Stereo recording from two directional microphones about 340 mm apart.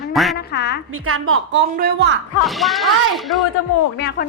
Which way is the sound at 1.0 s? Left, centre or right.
Right.